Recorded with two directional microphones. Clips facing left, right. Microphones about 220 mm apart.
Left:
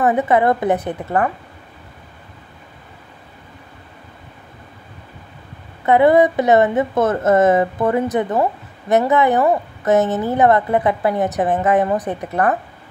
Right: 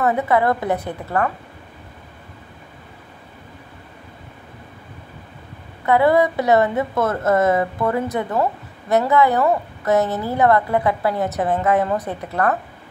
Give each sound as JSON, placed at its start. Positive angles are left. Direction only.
{"t": 0.0, "sound": "a woman's voice", "side_deg": 20}
{"t": 5.9, "sound": "a woman's voice", "side_deg": 20}